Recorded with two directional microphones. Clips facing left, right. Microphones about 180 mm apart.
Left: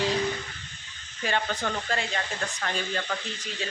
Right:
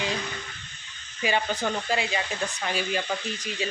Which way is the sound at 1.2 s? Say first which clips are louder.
Right 2 dB; 10° right (ahead or behind).